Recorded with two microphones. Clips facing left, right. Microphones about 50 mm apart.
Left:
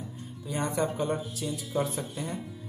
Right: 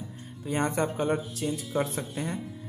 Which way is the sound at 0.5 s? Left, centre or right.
Right.